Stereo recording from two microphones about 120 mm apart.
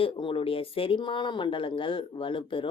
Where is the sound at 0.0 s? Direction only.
50° left (ahead or behind).